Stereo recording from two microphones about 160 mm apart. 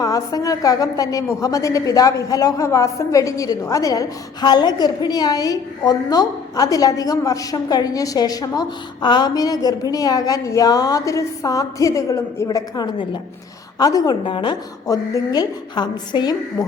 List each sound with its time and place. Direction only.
0.0 s a woman's voice: 25° left (ahead or behind)